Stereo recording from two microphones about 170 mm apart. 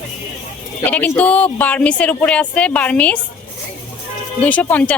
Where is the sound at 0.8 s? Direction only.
10° left (ahead or behind).